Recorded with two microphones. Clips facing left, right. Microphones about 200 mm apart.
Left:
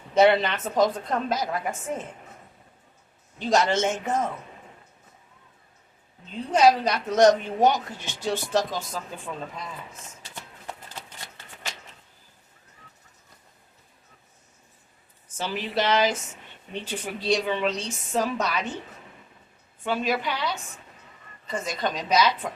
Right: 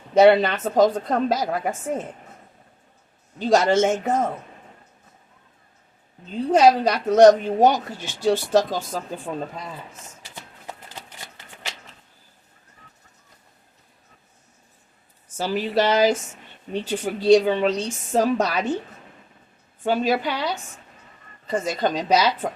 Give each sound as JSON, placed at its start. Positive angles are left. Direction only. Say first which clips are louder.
{"t": 0.1, "sound": "a woman's voice", "louder": "right 5 dB", "side_deg": -40}
{"t": 3.3, "sound": "a woman's voice", "louder": "right 5 dB", "side_deg": -35}
{"t": 6.5, "sound": "a woman's voice", "louder": "right 3 dB", "side_deg": -40}
{"t": 15.4, "sound": "a woman's voice", "louder": "right 6 dB", "side_deg": -40}
{"t": 19.8, "sound": "a woman's voice", "louder": "right 5 dB", "side_deg": -40}